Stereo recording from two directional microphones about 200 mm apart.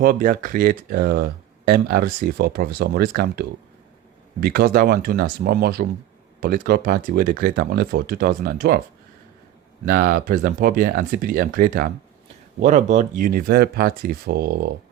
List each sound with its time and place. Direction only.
0.0 s speech: 45° right (ahead or behind)
9.8 s speech: 45° right (ahead or behind)
12.6 s speech: 35° right (ahead or behind)